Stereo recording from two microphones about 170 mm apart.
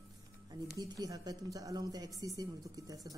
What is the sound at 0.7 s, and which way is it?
A woman's voice, 20° right (ahead or behind).